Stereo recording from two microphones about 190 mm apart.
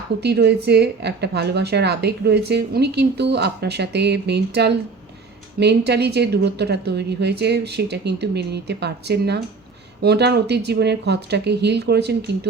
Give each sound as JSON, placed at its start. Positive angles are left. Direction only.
{"t": 0.2, "sound": "a woman's voice", "side_deg": -60}